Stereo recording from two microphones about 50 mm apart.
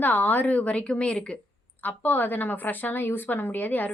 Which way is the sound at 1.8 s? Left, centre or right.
Left.